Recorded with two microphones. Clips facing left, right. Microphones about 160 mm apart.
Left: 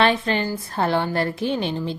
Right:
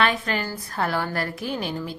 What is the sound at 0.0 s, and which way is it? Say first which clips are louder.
A woman's voice: left 4 dB; 25° left (ahead or behind).